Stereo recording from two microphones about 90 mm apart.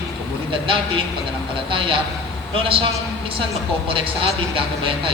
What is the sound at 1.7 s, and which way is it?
Speech, 75° right (ahead or behind).